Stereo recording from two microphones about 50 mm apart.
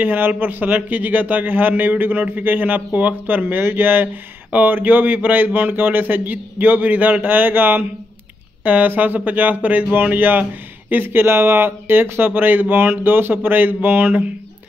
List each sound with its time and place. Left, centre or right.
0.0 s a man's voice: right